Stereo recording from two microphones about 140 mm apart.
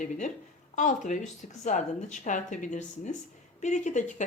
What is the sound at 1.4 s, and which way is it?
Speech, 60° left (ahead or behind).